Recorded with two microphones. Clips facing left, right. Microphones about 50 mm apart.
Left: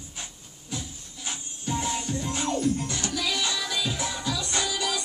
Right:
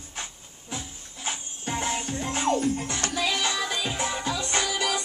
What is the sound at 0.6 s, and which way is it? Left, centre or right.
Music, right.